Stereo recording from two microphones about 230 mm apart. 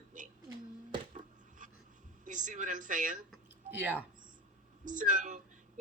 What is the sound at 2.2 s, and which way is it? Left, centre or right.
A woman's voice, right.